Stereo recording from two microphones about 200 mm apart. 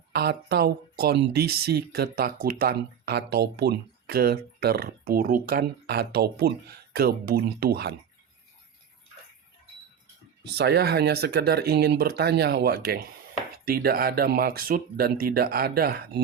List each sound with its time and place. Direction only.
0.1 s speech: 55° right (ahead or behind)
10.4 s speech: 55° right (ahead or behind)